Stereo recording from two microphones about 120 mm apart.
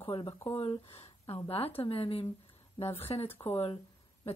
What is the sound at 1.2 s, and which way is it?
Speech, 55° left (ahead or behind).